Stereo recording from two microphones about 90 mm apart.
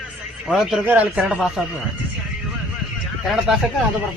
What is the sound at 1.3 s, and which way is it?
Speech, 5° right (ahead or behind).